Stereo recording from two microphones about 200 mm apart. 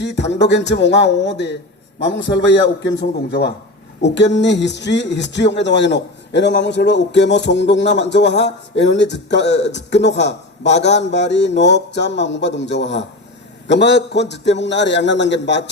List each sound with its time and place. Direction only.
0.0 s speech: 60° left (ahead or behind)